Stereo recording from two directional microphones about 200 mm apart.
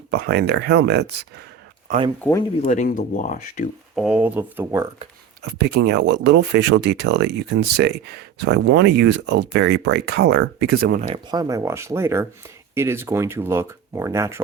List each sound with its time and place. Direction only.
0.1 s speech: 55° right (ahead or behind)
2.6 s speech: 40° left (ahead or behind)
3.9 s speech: 5° right (ahead or behind)
5.5 s speech: 55° right (ahead or behind)
11.1 s speech: 20° right (ahead or behind)